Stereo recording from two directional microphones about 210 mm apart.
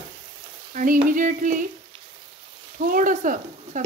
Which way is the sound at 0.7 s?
40° right (ahead or behind).